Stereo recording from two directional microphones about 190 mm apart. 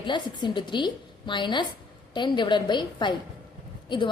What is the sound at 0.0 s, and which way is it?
A woman's voice, 25° left (ahead or behind).